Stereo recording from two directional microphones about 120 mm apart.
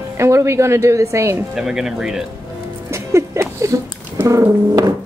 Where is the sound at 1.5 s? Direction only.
5° right (ahead or behind).